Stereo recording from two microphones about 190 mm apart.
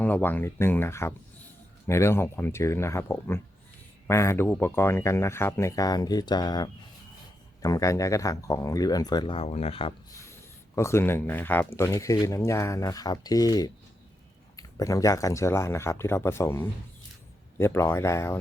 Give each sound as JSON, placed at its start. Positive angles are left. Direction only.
{"t": 0.0, "sound": "speech", "side_deg": 10}
{"t": 10.8, "sound": "speech", "side_deg": 15}